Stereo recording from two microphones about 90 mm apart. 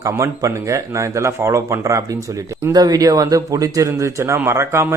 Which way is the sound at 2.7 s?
45° right (ahead or behind).